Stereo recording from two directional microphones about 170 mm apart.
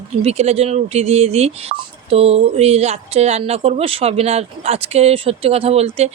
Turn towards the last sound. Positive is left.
turn(degrees=-35)  # may be behind; listen again after turning